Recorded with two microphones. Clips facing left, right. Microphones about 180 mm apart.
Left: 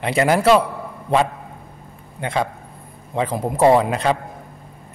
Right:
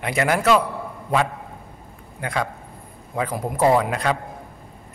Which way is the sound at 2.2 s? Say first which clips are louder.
Left 3 dB; 25° left (ahead or behind).